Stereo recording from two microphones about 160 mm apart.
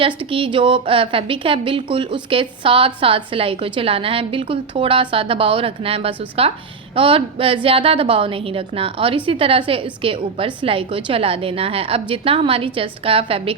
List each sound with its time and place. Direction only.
0.0 s a woman's voice: 35° right (ahead or behind)